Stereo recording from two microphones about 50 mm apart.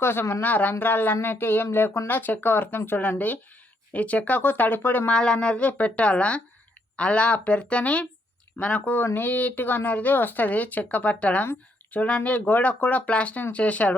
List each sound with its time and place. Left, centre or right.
0.0 s speech: left
0.4 s speech: left
4.4 s speech: left
5.0 s speech: centre